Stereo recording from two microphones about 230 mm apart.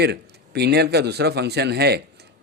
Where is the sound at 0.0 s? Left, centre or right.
Right.